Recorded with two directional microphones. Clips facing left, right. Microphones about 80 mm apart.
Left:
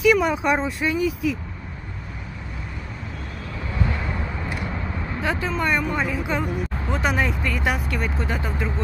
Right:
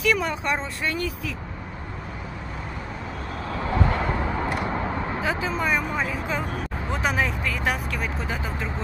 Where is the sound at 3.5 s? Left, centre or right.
Right.